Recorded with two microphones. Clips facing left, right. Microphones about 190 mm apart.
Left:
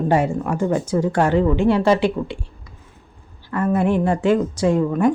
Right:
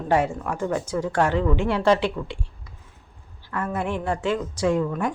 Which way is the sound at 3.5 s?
10° left (ahead or behind).